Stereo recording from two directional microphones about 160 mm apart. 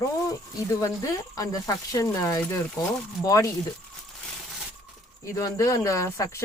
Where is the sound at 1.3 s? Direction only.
20° left (ahead or behind).